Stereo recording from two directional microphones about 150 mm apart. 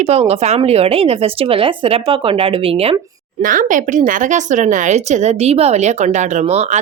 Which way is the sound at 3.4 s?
65° right (ahead or behind).